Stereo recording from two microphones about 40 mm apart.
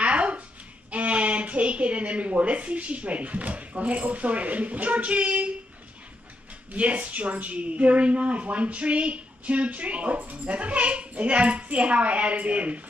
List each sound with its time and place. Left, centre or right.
0.0 s a sound: right
0.9 s speech: right
6.7 s speech: right